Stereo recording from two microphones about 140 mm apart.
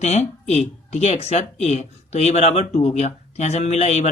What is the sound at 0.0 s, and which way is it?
Speech, 50° left (ahead or behind).